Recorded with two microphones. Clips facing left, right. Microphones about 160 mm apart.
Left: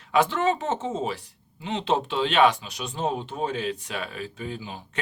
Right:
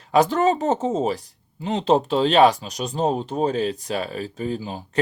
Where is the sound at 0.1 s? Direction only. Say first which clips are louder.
Right 5 dB; 40° right (ahead or behind).